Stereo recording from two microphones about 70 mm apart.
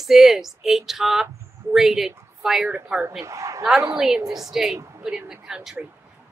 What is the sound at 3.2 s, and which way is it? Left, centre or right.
Speech, right.